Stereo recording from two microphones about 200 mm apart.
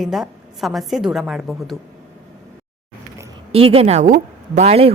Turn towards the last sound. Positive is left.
turn(degrees=-30)  # may be behind; listen again after turning